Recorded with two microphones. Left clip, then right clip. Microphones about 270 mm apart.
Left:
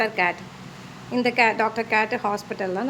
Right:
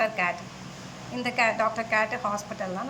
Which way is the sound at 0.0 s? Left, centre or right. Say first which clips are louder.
Left 4 dB; centre.